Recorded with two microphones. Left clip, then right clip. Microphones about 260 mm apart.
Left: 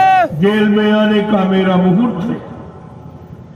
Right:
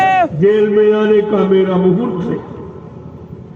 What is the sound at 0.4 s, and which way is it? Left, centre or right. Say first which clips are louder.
A man's voice: right 3 dB; left.